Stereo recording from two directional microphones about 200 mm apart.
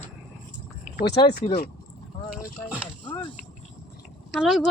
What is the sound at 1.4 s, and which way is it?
Speech, 30° left (ahead or behind).